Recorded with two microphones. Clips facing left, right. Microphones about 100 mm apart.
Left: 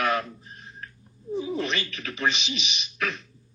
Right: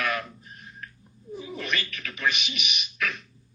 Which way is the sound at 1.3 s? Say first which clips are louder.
Left 4 dB; 30° left (ahead or behind).